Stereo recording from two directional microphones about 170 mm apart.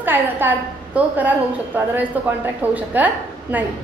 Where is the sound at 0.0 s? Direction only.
10° right (ahead or behind).